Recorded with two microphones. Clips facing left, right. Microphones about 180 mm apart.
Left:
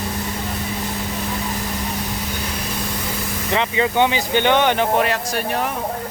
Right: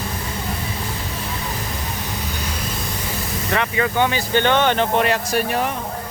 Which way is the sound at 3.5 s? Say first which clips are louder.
Left 1 dB; 20° left (ahead or behind).